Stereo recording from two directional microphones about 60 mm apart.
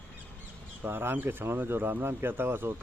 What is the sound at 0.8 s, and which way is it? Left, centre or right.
Speech, right.